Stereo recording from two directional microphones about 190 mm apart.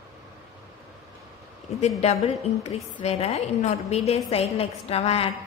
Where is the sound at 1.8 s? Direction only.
35° left (ahead or behind).